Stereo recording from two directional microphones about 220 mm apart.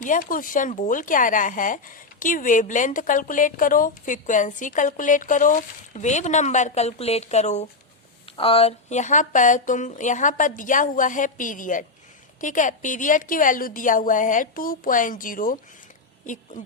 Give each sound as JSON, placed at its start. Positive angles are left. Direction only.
{"t": 0.0, "sound": "speech", "side_deg": 35}